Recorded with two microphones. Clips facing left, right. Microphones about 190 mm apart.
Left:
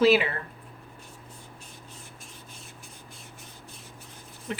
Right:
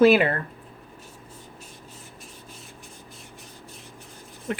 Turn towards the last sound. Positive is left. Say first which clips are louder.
# right 5 dB
turn(degrees=-55)  # may be behind; listen again after turning